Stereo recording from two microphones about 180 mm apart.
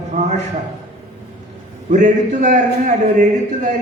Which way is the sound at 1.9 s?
45° right (ahead or behind).